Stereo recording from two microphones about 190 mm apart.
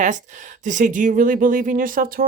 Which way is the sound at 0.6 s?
40° right (ahead or behind).